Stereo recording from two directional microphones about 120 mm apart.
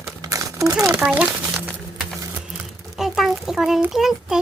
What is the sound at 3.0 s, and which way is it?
Speech, 5° right (ahead or behind).